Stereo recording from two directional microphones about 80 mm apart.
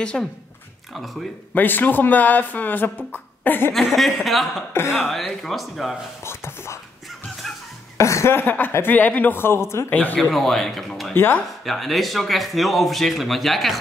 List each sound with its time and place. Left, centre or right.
0.1 s speech: centre
1.5 s speech: left
3.7 s speech: centre
4.7 s speech: left
5.1 s speech: centre
6.2 s a sound: left
7.4 s music: centre
8.0 s speech: left
9.8 s speech: left
10.3 s speech: centre
11.1 s speech: left
11.6 s speech: centre